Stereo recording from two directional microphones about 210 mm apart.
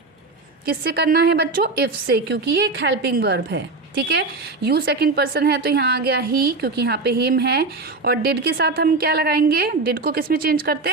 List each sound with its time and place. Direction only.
0.6 s a woman's voice: 50° right (ahead or behind)